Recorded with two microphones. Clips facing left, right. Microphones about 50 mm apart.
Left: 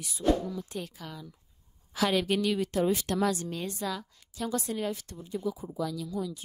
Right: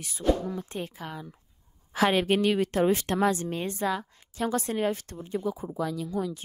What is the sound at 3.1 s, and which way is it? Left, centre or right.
A woman's voice, right.